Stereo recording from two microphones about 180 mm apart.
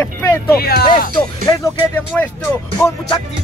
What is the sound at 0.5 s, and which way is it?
Speech, 60° left (ahead or behind).